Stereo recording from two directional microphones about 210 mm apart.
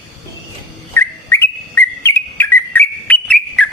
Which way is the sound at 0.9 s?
10° left (ahead or behind).